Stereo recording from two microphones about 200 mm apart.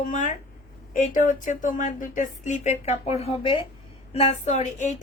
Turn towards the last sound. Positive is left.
turn(degrees=35)  # may be behind; listen again after turning